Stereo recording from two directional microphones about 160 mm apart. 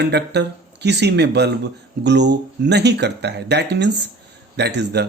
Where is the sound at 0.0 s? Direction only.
90° right.